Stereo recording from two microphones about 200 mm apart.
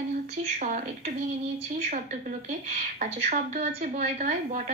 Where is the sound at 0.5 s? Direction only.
35° right (ahead or behind).